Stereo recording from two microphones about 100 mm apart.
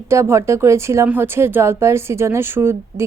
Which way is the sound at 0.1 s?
30° right (ahead or behind).